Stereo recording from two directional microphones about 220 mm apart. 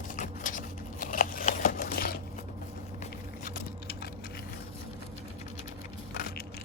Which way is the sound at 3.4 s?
45° left (ahead or behind).